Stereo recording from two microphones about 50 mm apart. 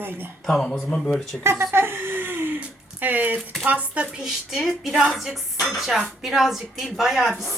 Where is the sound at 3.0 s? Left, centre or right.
Right.